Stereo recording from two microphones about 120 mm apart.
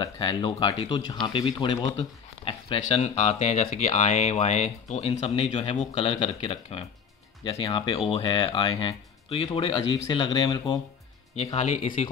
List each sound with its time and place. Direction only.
0.0 s speech: 40° left (ahead or behind)
2.0 s a sound: 45° left (ahead or behind)
2.9 s speech: 65° left (ahead or behind)
10.0 s speech: 40° left (ahead or behind)
11.5 s speech: 70° left (ahead or behind)